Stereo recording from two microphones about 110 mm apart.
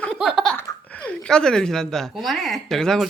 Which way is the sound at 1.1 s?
5° left (ahead or behind).